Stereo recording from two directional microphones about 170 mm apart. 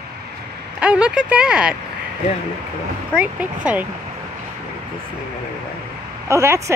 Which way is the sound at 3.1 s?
10° right (ahead or behind).